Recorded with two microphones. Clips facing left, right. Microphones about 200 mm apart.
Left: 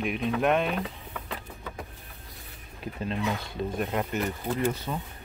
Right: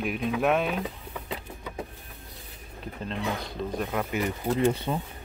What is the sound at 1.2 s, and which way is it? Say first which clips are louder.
Vehicle: right 2 dB; 15° right (ahead or behind).